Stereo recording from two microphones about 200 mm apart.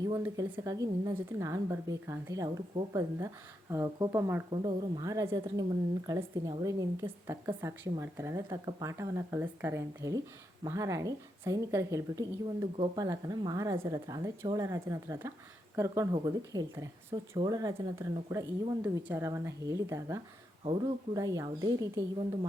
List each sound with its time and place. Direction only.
0.0 s speech: 20° right (ahead or behind)